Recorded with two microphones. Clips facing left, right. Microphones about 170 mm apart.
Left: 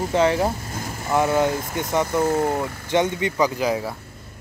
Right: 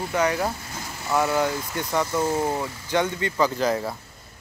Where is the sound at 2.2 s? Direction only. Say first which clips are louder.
Left 4 dB; 55° left (ahead or behind).